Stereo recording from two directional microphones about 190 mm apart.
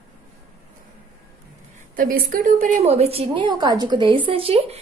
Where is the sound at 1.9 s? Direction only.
50° right (ahead or behind).